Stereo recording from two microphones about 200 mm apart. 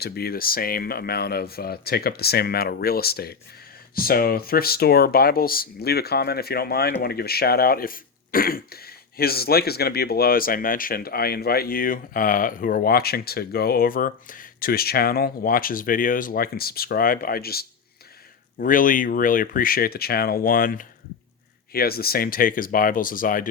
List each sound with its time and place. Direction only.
0.0 s speech: 50° left (ahead or behind)